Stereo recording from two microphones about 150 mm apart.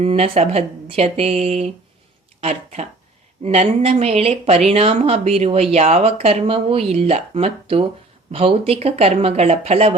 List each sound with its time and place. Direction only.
0.0 s speech: 45° right (ahead or behind)